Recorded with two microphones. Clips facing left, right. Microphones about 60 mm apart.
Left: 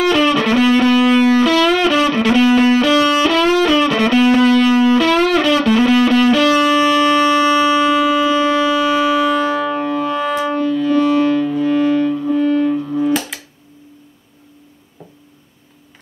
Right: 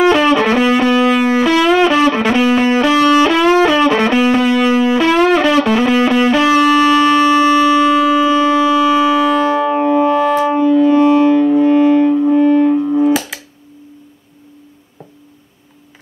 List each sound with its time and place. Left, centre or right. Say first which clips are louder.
0.0 s music: right 3 dB; right
7.7 s music: right 3 dB; centre; by 13.1 s right